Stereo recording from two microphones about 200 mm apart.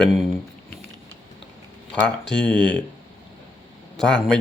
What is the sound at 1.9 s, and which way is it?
Speech, 5° left (ahead or behind).